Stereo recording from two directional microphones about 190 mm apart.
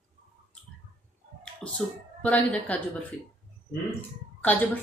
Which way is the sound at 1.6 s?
Centre (ahead or behind).